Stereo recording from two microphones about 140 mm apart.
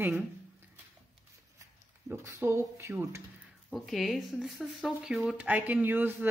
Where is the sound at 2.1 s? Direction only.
20° right (ahead or behind).